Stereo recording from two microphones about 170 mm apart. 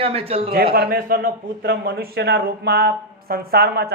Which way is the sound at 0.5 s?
65° right (ahead or behind).